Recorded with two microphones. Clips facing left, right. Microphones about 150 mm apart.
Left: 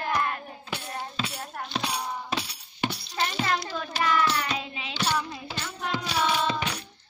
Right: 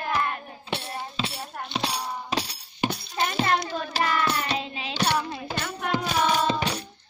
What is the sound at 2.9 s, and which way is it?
Music, 50° right (ahead or behind).